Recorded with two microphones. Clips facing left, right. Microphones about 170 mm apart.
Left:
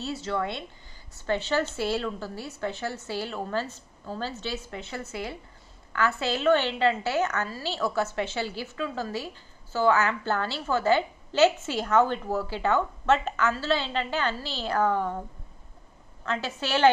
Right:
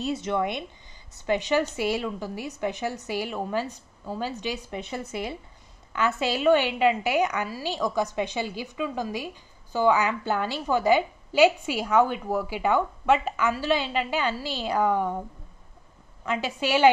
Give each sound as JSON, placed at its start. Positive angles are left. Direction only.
{"t": 0.0, "sound": "a woman's voice", "side_deg": -20}
{"t": 16.3, "sound": "a woman's voice", "side_deg": -15}